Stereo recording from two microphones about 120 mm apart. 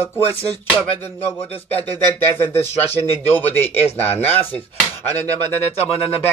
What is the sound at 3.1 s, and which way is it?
Speech, 15° left (ahead or behind).